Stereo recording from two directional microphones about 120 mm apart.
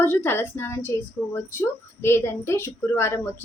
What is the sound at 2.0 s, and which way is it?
A woman's voice, 20° left (ahead or behind).